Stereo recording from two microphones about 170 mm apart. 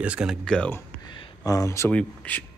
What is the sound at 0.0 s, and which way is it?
Speech, 5° right (ahead or behind).